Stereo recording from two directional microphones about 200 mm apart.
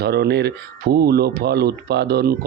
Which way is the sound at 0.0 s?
55° right (ahead or behind).